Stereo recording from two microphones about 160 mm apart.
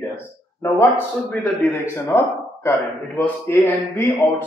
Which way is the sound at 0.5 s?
15° left (ahead or behind).